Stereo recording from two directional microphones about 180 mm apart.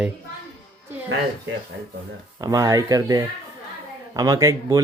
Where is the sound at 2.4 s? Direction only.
20° right (ahead or behind).